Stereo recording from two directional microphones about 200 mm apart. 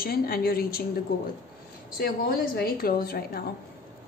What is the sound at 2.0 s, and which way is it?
A woman's voice, 50° left (ahead or behind).